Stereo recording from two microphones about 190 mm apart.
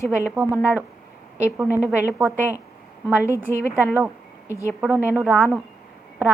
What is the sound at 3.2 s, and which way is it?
Speech, 15° left (ahead or behind).